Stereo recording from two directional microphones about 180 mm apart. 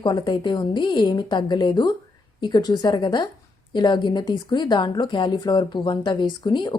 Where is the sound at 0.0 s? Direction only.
25° left (ahead or behind).